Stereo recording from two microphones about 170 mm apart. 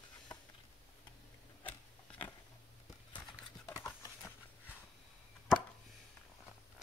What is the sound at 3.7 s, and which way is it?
Clip-clop, 15° left (ahead or behind).